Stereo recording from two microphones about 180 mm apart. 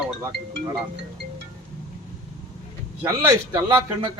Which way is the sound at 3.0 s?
15° right (ahead or behind).